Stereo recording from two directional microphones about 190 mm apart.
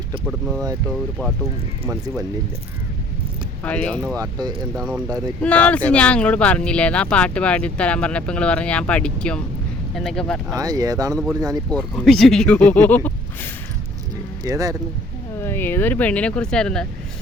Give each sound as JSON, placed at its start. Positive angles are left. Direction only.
{"t": 0.3, "sound": "speech", "side_deg": 0}
{"t": 3.6, "sound": "speech", "side_deg": 5}
{"t": 4.1, "sound": "speech", "side_deg": -20}
{"t": 4.7, "sound": "speech", "side_deg": -5}
{"t": 5.4, "sound": "speech", "side_deg": 5}
{"t": 10.5, "sound": "speech", "side_deg": -20}
{"t": 11.7, "sound": "speech", "side_deg": 5}
{"t": 14.4, "sound": "speech", "side_deg": -20}
{"t": 15.4, "sound": "speech", "side_deg": 10}